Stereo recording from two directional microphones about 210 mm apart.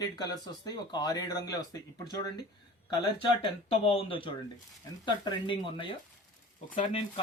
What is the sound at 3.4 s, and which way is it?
Speech, 25° left (ahead or behind).